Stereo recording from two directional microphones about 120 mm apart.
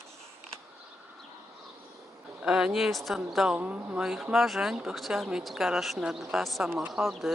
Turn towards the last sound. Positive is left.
turn(degrees=0)  # may be behind; listen again after turning